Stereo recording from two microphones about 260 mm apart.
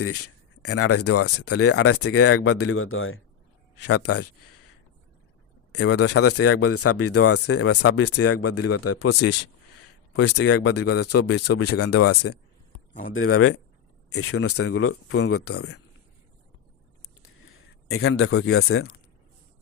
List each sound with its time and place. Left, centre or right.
0.0 s speech: left
3.8 s speech: left
5.7 s speech: left
10.3 s speech: left
12.9 s speech: left
13.1 s speech: left
17.8 s speech: left